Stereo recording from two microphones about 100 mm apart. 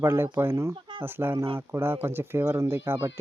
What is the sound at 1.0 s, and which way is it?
Speech, 20° right (ahead or behind).